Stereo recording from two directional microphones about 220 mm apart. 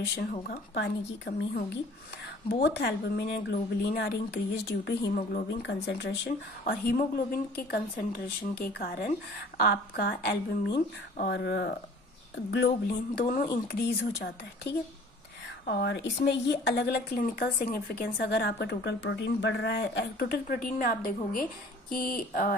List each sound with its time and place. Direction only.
0.2 s a woman's voice: 40° left (ahead or behind)
2.6 s a woman's voice: 50° left (ahead or behind)
13.2 s a woman's voice: 40° left (ahead or behind)